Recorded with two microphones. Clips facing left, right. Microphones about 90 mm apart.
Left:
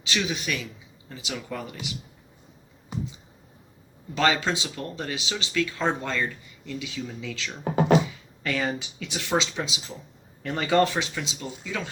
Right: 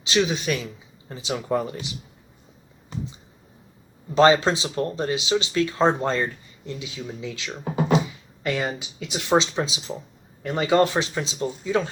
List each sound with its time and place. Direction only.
0.0 s speech: 25° right (ahead or behind)
2.9 s finger snapping: 10° left (ahead or behind)
4.1 s speech: 30° right (ahead or behind)